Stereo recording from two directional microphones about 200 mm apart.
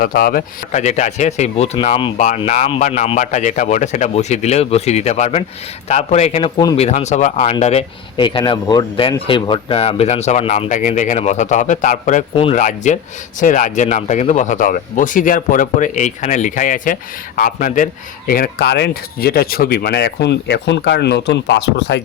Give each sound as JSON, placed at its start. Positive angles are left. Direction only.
{"t": 0.0, "sound": "speech", "side_deg": 45}